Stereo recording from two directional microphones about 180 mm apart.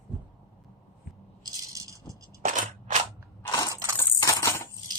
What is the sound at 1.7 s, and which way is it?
Rattle, 20° right (ahead or behind).